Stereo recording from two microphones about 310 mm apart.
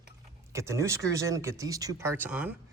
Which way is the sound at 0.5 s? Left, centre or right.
Centre.